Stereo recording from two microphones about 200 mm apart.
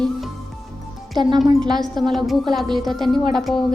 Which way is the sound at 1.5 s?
20° right (ahead or behind).